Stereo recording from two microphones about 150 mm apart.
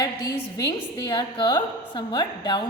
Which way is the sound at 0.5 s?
20° left (ahead or behind).